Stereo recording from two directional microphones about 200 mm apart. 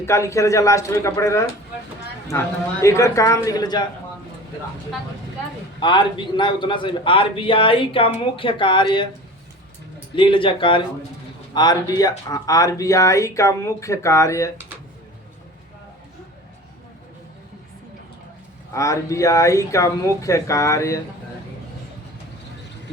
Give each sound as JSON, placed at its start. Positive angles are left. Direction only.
{"t": 0.0, "sound": "speech", "side_deg": 15}
{"t": 5.8, "sound": "a man's voice", "side_deg": 20}
{"t": 10.2, "sound": "a man's voice", "side_deg": 25}
{"t": 18.7, "sound": "speech", "side_deg": 15}